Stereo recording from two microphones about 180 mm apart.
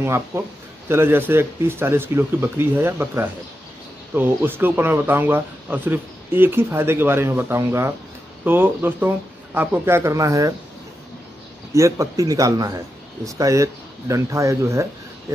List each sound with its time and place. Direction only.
0.0 s speech: 15° right (ahead or behind)
11.7 s speech: 15° right (ahead or behind)